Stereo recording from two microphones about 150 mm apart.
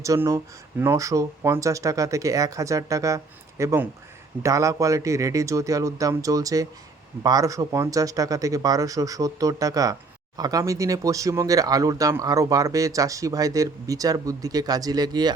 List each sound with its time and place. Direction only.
0.0 s speech: 20° right (ahead or behind)